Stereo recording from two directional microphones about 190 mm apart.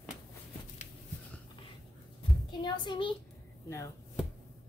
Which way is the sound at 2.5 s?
25° left (ahead or behind).